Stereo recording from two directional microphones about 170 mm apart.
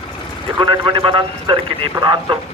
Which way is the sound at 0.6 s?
30° right (ahead or behind).